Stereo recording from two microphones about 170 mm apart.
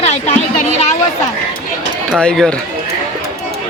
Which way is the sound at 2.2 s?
5° left (ahead or behind).